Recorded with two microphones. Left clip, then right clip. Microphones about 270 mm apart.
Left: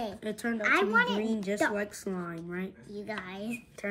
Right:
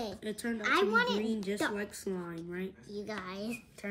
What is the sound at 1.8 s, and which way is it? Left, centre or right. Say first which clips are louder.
Speech: left 3 dB; centre.